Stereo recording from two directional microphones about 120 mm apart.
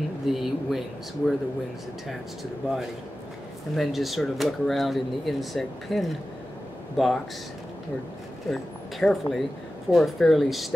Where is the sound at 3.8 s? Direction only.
Centre (ahead or behind).